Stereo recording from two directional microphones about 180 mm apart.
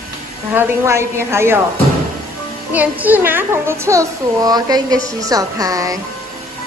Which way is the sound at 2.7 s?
10° right (ahead or behind).